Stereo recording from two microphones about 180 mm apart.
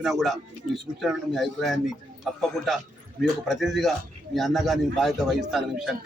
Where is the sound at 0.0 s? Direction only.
Centre (ahead or behind).